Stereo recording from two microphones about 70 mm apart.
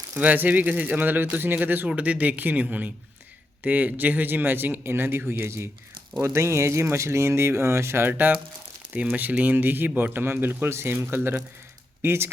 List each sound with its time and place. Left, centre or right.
0.1 s speech: right
9.1 s speech: right